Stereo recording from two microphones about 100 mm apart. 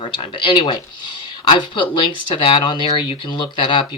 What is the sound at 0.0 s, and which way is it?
Speech, 60° left (ahead or behind).